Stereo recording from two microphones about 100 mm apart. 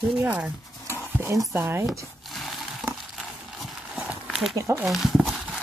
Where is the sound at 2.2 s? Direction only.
Centre (ahead or behind).